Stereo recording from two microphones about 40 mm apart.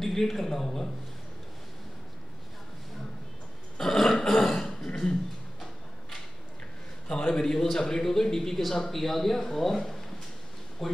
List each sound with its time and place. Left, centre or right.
0.0 s a man's voice: centre
3.7 s a sound: centre
4.3 s throat clearing: centre
7.2 s a man's voice: centre